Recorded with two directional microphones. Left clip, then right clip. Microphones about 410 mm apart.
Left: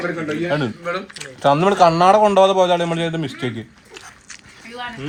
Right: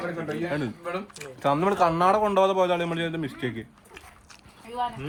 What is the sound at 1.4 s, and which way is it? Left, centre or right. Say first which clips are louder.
A man's voice: left 9 dB; left.